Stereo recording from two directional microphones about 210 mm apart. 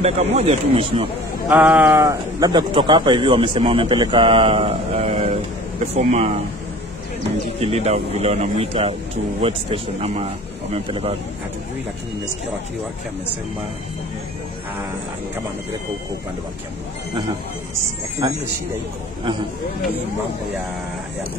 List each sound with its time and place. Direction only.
0.0 s a man's voice: 30° right (ahead or behind)
1.5 s a man's voice: 5° right (ahead or behind); by 6.4 s 30° right (ahead or behind)
7.6 s a man's voice: 30° right (ahead or behind)
18.2 s a man's voice: 20° right (ahead or behind)